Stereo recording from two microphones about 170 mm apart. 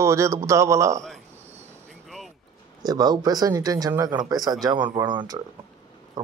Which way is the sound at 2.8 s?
25° right (ahead or behind).